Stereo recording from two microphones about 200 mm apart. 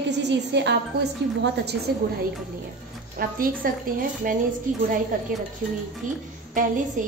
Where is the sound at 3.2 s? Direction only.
45° right (ahead or behind).